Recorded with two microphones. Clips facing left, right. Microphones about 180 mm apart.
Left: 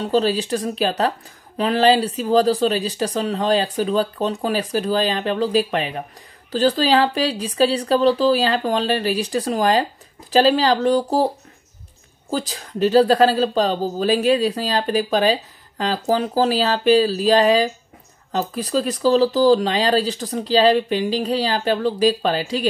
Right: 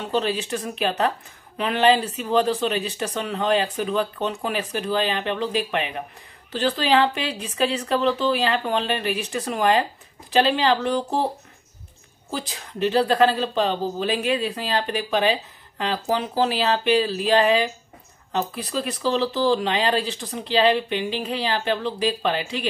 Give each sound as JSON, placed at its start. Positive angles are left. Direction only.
{"t": 0.0, "sound": "a woman's voice", "side_deg": 35}
{"t": 12.3, "sound": "a woman's voice", "side_deg": 40}